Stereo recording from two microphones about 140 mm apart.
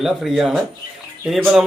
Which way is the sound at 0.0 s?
Centre (ahead or behind).